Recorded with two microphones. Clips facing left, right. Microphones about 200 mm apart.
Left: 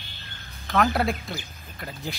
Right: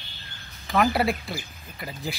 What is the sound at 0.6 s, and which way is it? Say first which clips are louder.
Speech: right 1 dB; 5° right (ahead or behind).